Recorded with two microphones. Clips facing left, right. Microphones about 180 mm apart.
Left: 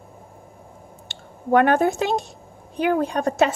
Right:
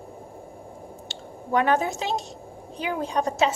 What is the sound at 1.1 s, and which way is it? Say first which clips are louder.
A woman's voice: left 6 dB; 55° left (ahead or behind).